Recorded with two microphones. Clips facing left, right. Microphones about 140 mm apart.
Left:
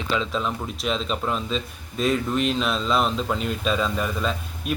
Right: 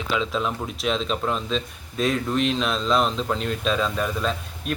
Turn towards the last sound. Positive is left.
turn(degrees=0)  # may be behind; listen again after turning